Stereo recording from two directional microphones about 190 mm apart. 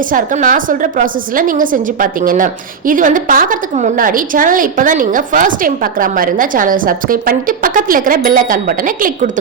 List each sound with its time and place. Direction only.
0.1 s a woman's voice: 45° right (ahead or behind)